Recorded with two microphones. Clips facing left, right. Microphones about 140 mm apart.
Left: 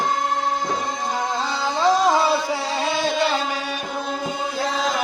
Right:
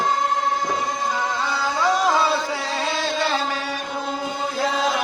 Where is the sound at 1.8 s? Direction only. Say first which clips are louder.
Left 2 dB; 15° left (ahead or behind).